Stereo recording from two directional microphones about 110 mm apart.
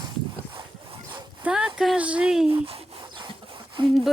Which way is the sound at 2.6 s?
50° right (ahead or behind).